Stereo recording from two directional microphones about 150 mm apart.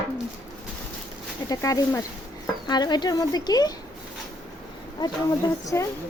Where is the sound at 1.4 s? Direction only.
25° left (ahead or behind).